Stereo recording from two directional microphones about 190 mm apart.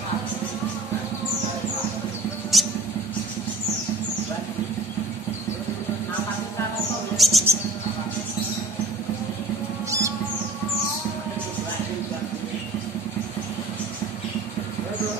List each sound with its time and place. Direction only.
2.5 s mouse: centre (ahead or behind)
7.2 s music: centre (ahead or behind)
9.8 s music: 15° right (ahead or behind)